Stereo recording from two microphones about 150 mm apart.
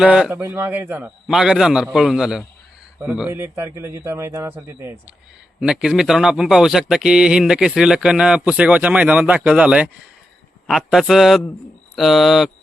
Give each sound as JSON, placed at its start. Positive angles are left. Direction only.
{"t": 0.0, "sound": "speech", "side_deg": -5}
{"t": 1.3, "sound": "a man's voice", "side_deg": -5}